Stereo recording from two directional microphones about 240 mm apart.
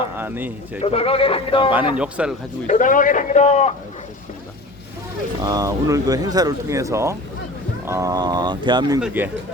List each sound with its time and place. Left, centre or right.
0.2 s speech: centre
0.8 s speech: left
2.0 s speech: centre
2.6 s a man's voice: left
5.4 s speech: centre
9.0 s speech: centre